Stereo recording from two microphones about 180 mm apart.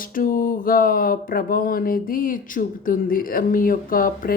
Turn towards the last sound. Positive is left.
turn(degrees=50)  # may be behind; listen again after turning